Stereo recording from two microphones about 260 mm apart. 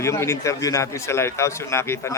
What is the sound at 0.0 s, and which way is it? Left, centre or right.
A man's voice, centre.